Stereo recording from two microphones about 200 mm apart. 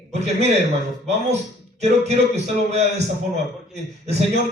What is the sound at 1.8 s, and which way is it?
Speech, 35° right (ahead or behind).